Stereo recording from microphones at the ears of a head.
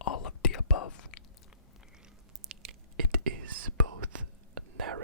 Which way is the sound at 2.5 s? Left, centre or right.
Right.